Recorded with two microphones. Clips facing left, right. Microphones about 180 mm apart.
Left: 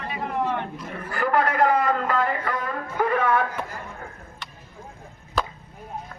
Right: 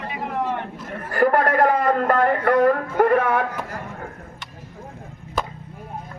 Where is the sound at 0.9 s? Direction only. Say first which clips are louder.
Right 5 dB; 50° right (ahead or behind); by 3.8 s 70° right (ahead or behind).